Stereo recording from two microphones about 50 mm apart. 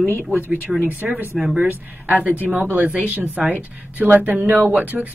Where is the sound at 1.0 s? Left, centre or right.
Centre.